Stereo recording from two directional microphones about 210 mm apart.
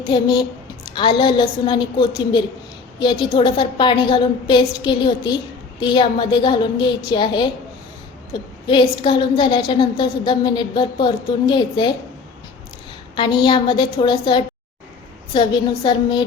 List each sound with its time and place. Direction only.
0.1 s a woman's voice: 20° left (ahead or behind)
13.1 s a woman's voice: 20° left (ahead or behind)